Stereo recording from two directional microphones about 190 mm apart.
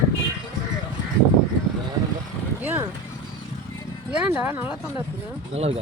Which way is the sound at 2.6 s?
10° right (ahead or behind).